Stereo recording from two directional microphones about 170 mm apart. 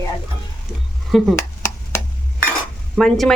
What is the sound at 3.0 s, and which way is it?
Speech, centre (ahead or behind).